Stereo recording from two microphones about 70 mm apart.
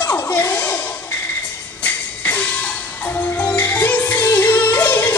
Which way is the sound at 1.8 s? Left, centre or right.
Left.